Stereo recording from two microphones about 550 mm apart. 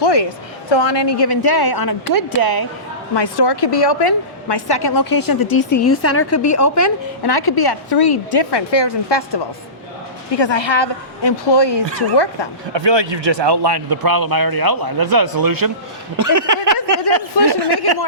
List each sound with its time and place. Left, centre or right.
0.0 s a woman's voice: left
5.8 s a woman's voice: left
12.7 s speech: right
16.1 s a sound: right
17.4 s speech: right